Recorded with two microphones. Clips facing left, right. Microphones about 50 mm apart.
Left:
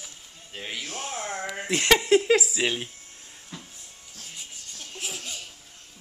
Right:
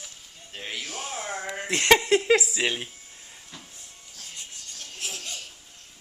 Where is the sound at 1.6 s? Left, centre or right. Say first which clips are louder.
Left 1 dB; centre.